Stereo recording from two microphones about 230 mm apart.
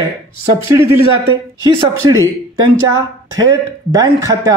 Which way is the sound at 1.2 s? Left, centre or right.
Centre.